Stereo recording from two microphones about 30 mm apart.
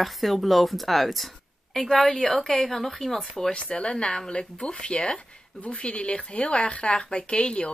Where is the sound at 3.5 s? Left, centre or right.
Left.